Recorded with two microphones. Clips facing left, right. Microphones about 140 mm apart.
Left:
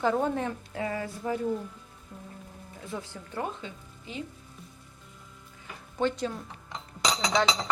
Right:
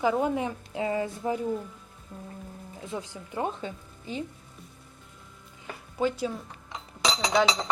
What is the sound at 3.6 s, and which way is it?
Speech, 35° right (ahead or behind).